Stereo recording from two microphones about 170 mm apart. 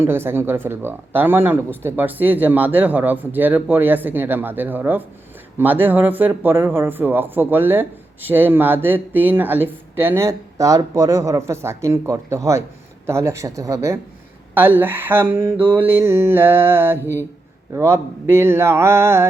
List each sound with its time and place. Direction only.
0.0 s speech: 15° right (ahead or behind)